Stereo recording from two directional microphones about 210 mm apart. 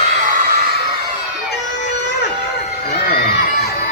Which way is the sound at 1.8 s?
60° left (ahead or behind).